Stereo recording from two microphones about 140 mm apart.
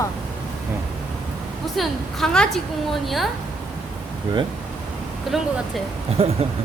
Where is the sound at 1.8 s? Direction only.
5° left (ahead or behind).